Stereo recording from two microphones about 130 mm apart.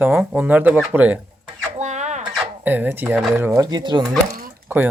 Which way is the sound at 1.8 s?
65° right (ahead or behind).